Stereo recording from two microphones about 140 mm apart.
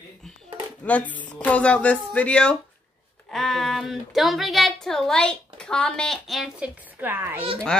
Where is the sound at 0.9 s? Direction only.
10° left (ahead or behind); by 7.5 s 15° right (ahead or behind).